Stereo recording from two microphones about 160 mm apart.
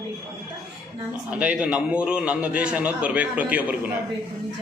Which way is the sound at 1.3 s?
5° right (ahead or behind).